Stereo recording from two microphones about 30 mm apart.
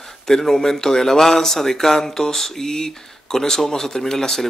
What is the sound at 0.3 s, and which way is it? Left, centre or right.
A man's voice, centre.